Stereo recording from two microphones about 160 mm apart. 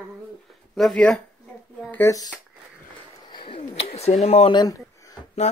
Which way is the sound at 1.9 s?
20° left (ahead or behind).